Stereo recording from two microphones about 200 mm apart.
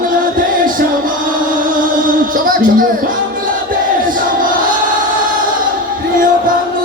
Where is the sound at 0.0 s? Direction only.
45° right (ahead or behind).